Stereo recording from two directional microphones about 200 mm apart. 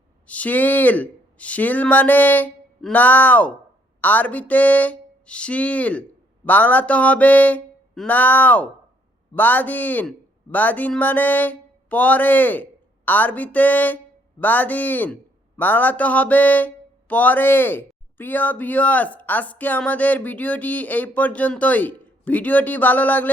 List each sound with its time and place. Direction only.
0.3 s a man's voice: 5° left (ahead or behind)